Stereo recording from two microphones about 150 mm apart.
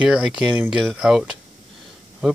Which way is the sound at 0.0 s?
5° right (ahead or behind).